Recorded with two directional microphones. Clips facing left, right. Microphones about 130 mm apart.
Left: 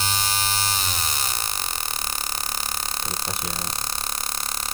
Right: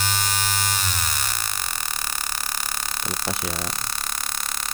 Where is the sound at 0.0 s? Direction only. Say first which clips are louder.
Even; 30° left (ahead or behind).